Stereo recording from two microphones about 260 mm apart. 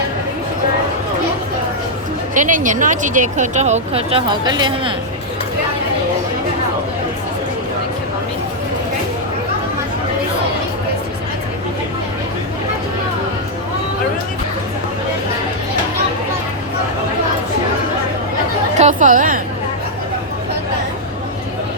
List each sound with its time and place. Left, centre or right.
2.3 s speech: right
18.8 s speech: right